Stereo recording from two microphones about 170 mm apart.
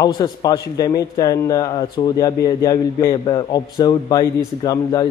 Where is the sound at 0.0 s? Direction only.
20° left (ahead or behind).